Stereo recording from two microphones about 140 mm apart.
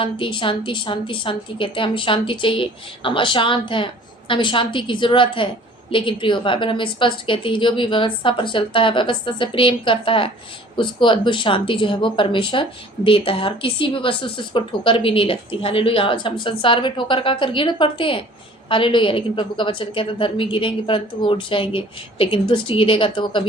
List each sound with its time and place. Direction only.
0.0 s a woman's voice: 35° left (ahead or behind)